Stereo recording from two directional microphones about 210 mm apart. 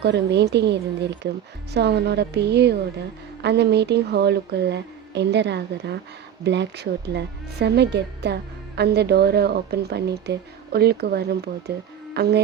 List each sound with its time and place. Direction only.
0.0 s a woman's voice: 55° right (ahead or behind)
12.1 s music: 50° right (ahead or behind)